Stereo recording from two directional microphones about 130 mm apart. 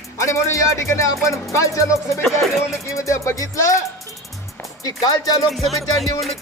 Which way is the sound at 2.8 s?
25° left (ahead or behind).